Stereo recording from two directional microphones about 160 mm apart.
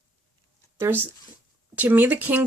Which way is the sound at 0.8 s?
15° right (ahead or behind).